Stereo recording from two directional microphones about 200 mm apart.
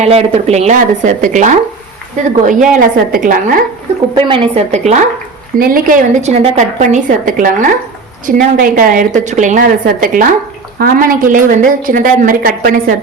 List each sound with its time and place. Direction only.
0.0 s a woman's voice: 30° right (ahead or behind)
4.1 s a woman's voice: 30° right (ahead or behind)
5.5 s a woman's voice: 45° right (ahead or behind)